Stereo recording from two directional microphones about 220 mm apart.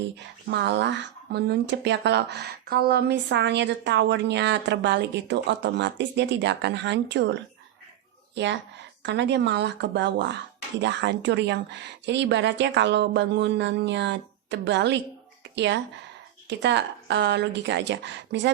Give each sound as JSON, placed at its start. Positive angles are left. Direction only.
{"t": 0.2, "sound": "speech", "side_deg": -50}
{"t": 8.4, "sound": "speech", "side_deg": -50}